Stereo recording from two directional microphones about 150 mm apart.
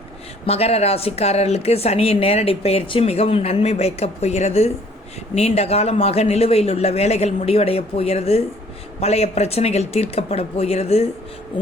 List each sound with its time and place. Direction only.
0.4 s a woman's voice: 45° left (ahead or behind)